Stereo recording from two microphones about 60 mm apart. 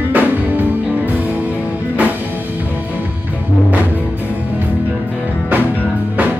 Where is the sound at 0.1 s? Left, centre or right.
Right.